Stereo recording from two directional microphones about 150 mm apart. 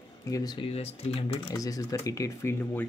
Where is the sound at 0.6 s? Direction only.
40° left (ahead or behind).